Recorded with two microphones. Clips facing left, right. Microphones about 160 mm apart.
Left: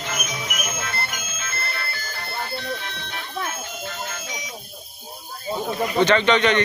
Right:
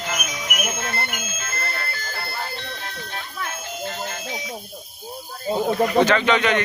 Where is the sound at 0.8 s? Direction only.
45° right (ahead or behind).